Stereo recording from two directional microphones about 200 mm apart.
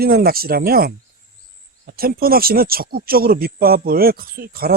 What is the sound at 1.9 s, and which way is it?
Speech, 50° right (ahead or behind).